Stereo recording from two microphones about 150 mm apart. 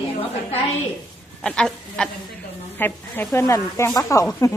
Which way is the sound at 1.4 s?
5° left (ahead or behind).